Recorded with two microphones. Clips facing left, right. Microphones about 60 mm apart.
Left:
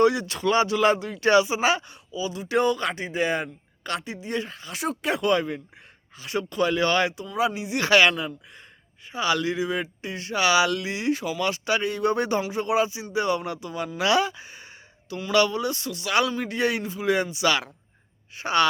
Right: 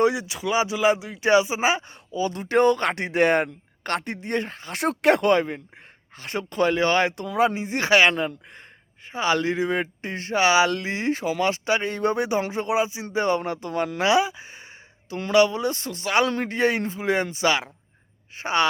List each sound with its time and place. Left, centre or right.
0.0 s speech: centre
1.9 s speech: right
4.8 s speech: right
5.3 s speech: right
8.1 s speech: right
12.1 s speech: centre
12.4 s speech: right
13.1 s speech: right
13.7 s speech: right
14.0 s speech: centre